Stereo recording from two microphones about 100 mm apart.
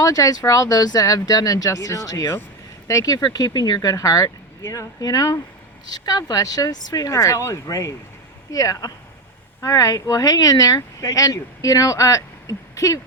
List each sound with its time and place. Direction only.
0.0 s speech: 35° left (ahead or behind)